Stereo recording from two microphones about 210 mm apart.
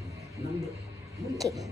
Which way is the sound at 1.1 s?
15° right (ahead or behind).